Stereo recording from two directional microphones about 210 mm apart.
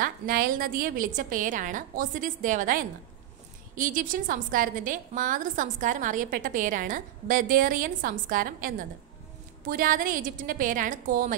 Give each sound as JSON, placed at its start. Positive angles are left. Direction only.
{"t": 0.0, "sound": "a woman's voice", "side_deg": -40}